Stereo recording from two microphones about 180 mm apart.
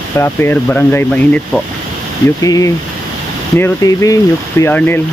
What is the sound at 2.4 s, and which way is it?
Speech, 20° left (ahead or behind).